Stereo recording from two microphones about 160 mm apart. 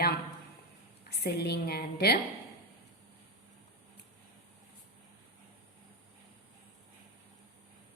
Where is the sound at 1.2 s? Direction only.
90° left.